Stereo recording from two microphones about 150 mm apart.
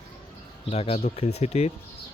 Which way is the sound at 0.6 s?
40° left (ahead or behind).